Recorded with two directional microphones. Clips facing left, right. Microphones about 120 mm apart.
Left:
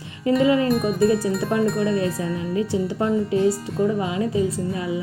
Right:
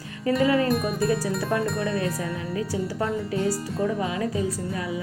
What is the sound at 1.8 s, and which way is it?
A woman's voice, 30° left (ahead or behind).